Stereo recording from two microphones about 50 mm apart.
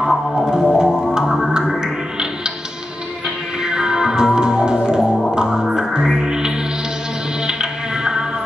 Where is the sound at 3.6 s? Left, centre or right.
Centre.